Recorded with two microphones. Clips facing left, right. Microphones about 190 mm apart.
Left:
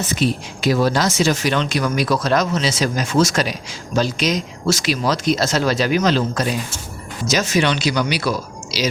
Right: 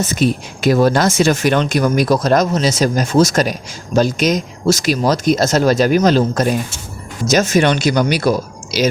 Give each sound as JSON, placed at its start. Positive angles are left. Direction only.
{"t": 0.1, "sound": "speech", "side_deg": -45}